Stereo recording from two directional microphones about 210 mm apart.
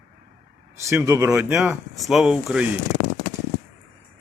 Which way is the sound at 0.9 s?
15° right (ahead or behind).